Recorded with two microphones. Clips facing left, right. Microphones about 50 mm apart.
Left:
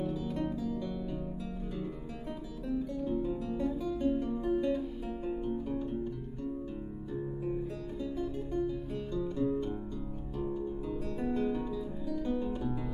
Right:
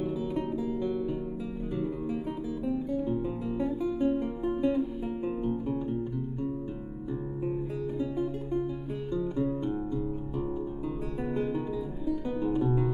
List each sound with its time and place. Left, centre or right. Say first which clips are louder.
0.0 s music: right 3 dB; centre
2.6 s music: right 3 dB; centre
8.0 s music: right 2 dB; centre
11.2 s guitar: right 1 dB; centre
12.1 s music: right 4 dB; centre